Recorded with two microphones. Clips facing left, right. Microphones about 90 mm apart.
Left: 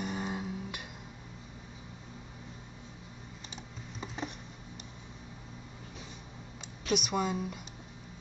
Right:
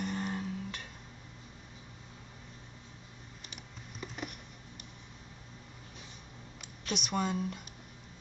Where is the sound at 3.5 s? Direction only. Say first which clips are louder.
Left 4 dB; 30° left (ahead or behind).